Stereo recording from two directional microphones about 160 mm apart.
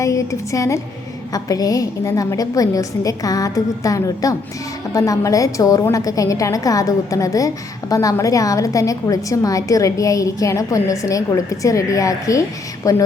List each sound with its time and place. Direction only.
0.0 s a woman's voice: 20° left (ahead or behind)